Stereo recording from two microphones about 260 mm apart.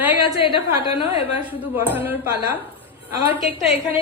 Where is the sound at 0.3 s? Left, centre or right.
Centre.